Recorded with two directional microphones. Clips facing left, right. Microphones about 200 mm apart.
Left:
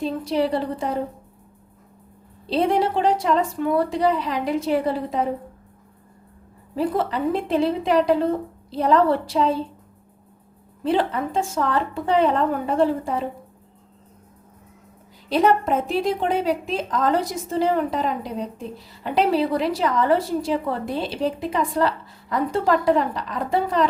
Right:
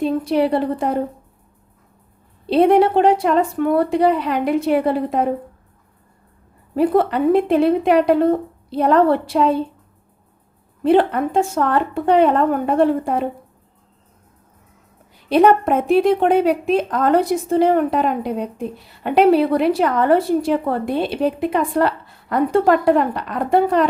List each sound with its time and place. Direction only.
0.0 s a woman's voice: 60° right (ahead or behind)
2.5 s a woman's voice: 60° right (ahead or behind)
6.7 s a woman's voice: 60° right (ahead or behind)
10.8 s a woman's voice: 60° right (ahead or behind)
15.3 s a woman's voice: 60° right (ahead or behind)